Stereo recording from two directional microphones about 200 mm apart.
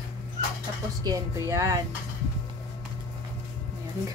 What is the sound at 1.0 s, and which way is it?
Speech, 15° right (ahead or behind).